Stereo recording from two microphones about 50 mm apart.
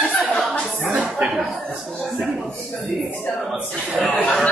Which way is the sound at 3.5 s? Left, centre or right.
Centre.